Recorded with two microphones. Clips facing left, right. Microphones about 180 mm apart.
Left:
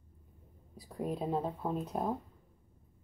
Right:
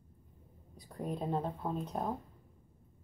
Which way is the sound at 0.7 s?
Centre (ahead or behind).